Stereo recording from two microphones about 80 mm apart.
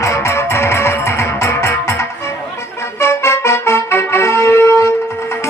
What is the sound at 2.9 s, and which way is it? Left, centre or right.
Music, left.